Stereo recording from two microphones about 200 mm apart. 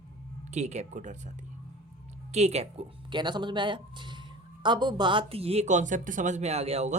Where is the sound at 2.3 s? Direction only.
30° right (ahead or behind).